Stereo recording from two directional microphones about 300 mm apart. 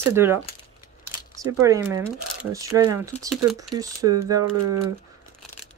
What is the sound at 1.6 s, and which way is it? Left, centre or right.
Speech, centre.